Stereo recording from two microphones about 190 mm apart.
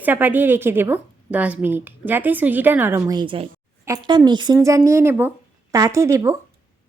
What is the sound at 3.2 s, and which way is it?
A woman's voice, 25° right (ahead or behind).